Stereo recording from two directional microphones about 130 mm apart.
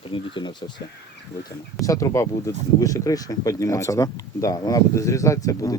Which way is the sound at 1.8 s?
25° left (ahead or behind).